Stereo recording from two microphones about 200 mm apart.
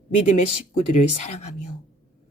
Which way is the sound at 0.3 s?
35° left (ahead or behind).